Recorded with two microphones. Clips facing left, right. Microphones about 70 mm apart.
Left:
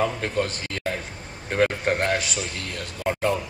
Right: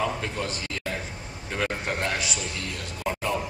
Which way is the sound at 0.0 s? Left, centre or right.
Left.